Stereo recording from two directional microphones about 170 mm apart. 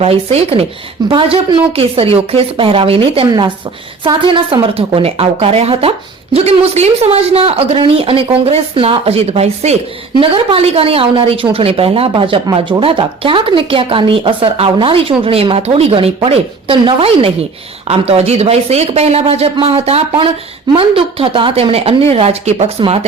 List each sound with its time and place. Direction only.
0.0 s a woman's voice: 35° right (ahead or behind)